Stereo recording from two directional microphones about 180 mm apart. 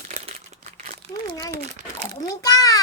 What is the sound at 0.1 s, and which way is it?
Crumpling, 35° right (ahead or behind).